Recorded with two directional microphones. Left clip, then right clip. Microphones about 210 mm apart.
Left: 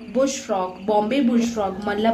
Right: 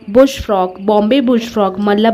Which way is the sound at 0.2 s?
50° right (ahead or behind).